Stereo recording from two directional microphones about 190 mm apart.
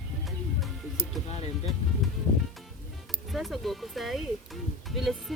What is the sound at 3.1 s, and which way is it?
Speech, centre (ahead or behind).